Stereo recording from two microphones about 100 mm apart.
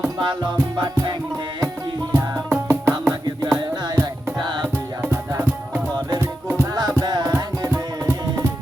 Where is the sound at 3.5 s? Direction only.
45° right (ahead or behind).